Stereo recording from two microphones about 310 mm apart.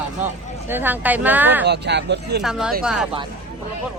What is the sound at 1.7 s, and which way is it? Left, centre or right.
Speech, right.